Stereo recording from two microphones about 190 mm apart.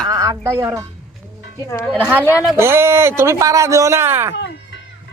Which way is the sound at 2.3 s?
10° right (ahead or behind).